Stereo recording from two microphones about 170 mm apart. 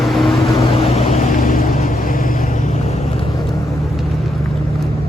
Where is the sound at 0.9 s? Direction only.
40° left (ahead or behind).